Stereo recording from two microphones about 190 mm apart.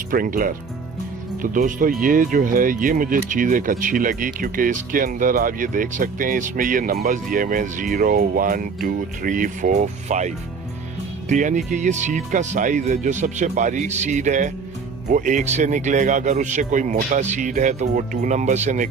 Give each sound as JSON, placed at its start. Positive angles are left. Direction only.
{"t": 0.1, "sound": "speech", "side_deg": -50}